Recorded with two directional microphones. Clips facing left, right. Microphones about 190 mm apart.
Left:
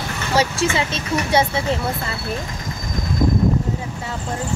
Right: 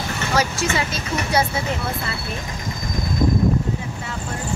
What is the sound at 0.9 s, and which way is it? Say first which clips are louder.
Speech: left 3 dB; 25° left (ahead or behind).